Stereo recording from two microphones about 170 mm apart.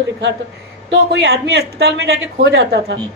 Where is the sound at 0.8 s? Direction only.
85° right.